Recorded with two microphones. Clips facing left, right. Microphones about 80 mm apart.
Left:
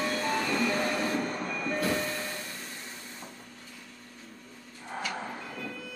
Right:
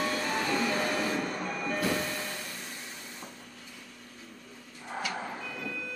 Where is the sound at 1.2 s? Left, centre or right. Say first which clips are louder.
Left 1 dB; left.